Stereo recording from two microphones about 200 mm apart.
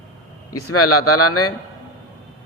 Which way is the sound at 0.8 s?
90° left.